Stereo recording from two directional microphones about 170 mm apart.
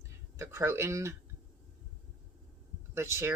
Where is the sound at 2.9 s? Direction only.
15° right (ahead or behind).